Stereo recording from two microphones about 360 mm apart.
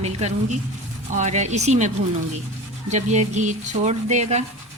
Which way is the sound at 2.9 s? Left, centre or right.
Centre.